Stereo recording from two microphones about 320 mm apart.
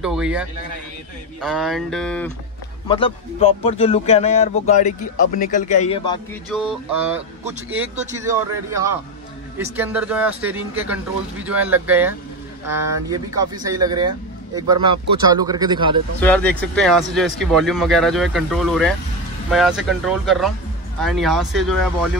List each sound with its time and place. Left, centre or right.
0.0 s speech: centre
2.9 s speech: centre
6.5 s a man's voice: centre
16.2 s speech: centre